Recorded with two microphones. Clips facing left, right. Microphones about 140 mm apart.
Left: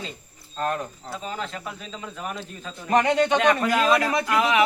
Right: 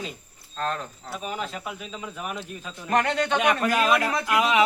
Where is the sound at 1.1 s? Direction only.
15° right (ahead or behind).